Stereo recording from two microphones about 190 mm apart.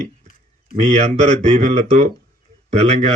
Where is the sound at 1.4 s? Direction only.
40° right (ahead or behind).